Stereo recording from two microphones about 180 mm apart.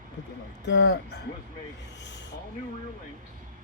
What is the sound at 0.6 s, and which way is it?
Speech, 85° left.